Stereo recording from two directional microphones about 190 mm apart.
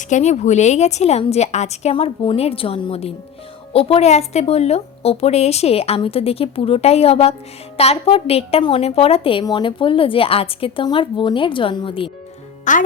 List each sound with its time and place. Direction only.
0.1 s a woman's voice: 35° left (ahead or behind)
12.7 s a woman's voice: 40° left (ahead or behind)